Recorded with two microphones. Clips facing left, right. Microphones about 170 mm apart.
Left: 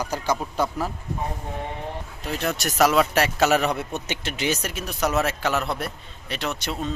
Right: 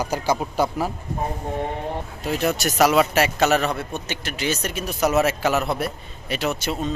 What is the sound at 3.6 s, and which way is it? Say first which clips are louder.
Speech: even; 15° left (ahead or behind).